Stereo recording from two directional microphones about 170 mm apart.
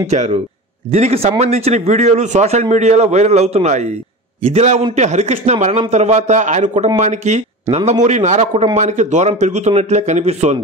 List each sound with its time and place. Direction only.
0.1 s a man's voice: 40° right (ahead or behind)